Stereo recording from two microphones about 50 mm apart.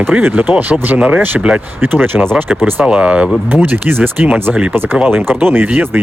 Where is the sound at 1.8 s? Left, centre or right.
Right.